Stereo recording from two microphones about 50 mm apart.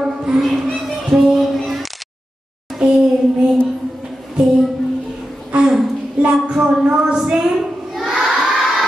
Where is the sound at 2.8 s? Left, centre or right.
Right.